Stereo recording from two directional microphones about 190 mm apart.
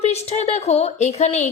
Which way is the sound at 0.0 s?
35° left (ahead or behind).